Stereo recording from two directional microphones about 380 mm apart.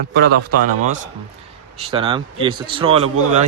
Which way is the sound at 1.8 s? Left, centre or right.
Centre.